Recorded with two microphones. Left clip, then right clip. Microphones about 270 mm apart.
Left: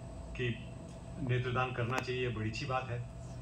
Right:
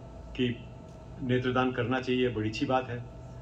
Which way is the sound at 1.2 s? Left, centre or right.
Right.